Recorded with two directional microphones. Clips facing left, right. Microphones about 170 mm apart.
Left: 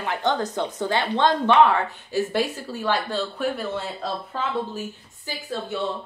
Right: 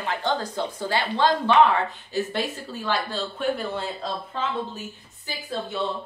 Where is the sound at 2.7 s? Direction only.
15° left (ahead or behind).